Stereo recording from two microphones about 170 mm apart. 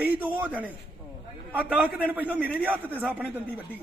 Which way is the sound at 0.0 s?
10° right (ahead or behind).